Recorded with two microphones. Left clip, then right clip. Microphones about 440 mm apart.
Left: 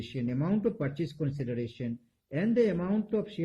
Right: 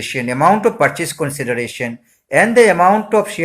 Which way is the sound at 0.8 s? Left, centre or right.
Right.